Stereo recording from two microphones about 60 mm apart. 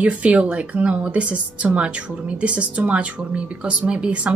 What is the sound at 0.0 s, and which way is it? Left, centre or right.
Speech, right.